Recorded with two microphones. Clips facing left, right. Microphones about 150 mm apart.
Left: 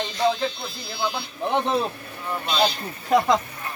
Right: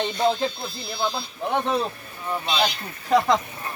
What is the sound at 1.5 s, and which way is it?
Speech, 15° left (ahead or behind).